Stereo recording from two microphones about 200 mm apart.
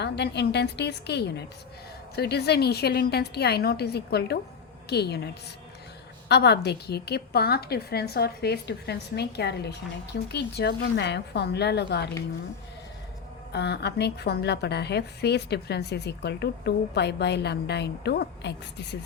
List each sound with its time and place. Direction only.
0.0 s a woman's voice: 55° left (ahead or behind)
13.5 s a woman's voice: 55° left (ahead or behind)